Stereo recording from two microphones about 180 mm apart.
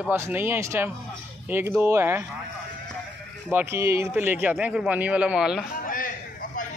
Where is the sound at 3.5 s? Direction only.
10° right (ahead or behind).